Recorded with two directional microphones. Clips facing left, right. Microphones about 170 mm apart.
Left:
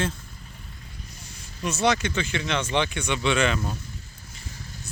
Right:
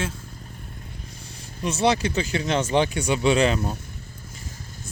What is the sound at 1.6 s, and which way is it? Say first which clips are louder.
Speech: right 2 dB; 30° right (ahead or behind).